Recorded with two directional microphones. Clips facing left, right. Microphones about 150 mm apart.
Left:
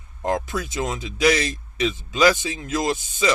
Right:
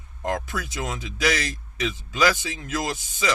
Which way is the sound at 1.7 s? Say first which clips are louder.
Left 3 dB; 20° left (ahead or behind).